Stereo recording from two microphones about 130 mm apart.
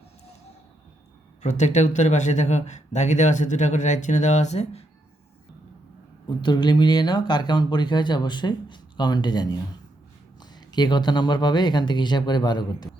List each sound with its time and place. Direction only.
1.4 s speech: 65° left (ahead or behind)
6.2 s speech: 35° left (ahead or behind)